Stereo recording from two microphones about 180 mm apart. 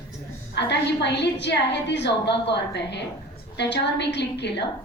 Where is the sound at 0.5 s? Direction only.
70° left (ahead or behind).